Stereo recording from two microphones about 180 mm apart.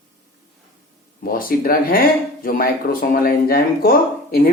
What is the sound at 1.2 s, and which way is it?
Speech, 55° left (ahead or behind).